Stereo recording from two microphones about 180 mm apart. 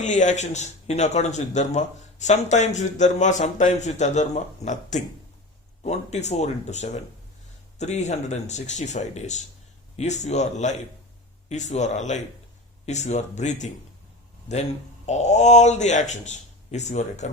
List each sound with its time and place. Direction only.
0.0 s speech: 40° left (ahead or behind)